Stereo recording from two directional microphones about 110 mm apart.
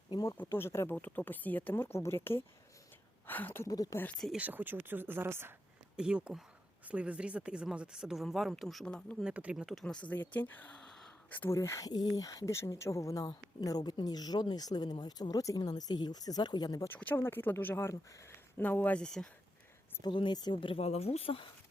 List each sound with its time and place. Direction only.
0.5 s speech: 25° left (ahead or behind)
3.7 s speech: 35° left (ahead or behind)
4.4 s speech: 15° right (ahead or behind)
6.0 s speech: 10° right (ahead or behind)
9.2 s speech: 10° right (ahead or behind)
9.7 s speech: 10° left (ahead or behind)
10.8 s gasp: 5° left (ahead or behind)
11.3 s speech: 15° left (ahead or behind)
11.5 s speech: 25° left (ahead or behind)
16.9 s speech: 15° left (ahead or behind)
20.0 s speech: 45° left (ahead or behind); by 21.4 s 60° left (ahead or behind)